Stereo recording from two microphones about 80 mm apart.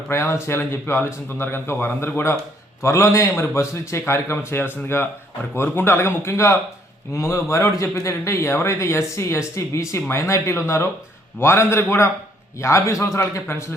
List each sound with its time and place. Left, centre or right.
0.1 s a man's voice: left